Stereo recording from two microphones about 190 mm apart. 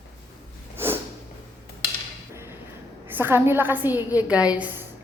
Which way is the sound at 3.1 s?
10° right (ahead or behind).